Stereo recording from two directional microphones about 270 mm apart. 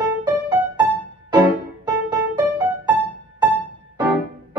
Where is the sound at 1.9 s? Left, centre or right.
Centre.